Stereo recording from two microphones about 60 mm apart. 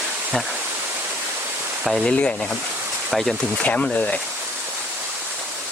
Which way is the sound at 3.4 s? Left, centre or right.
Left.